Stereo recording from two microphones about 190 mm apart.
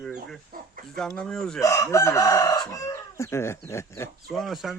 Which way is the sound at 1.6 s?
15° left (ahead or behind).